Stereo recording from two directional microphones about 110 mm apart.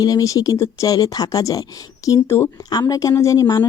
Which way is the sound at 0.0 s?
35° left (ahead or behind).